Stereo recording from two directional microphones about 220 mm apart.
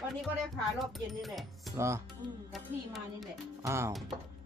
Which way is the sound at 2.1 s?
Centre (ahead or behind).